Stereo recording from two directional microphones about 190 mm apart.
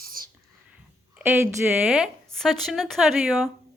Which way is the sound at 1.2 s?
5° right (ahead or behind).